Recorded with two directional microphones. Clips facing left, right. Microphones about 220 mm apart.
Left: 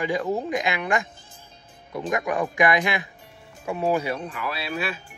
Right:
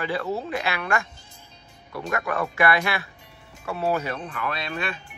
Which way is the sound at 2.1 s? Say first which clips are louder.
Left 2 dB; 15° left (ahead or behind).